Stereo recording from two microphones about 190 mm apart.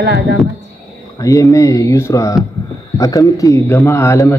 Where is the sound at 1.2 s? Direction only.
15° left (ahead or behind).